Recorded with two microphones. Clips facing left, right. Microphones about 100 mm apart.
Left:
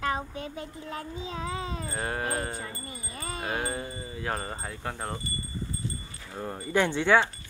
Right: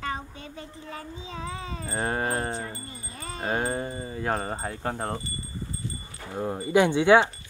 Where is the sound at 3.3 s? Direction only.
35° right (ahead or behind).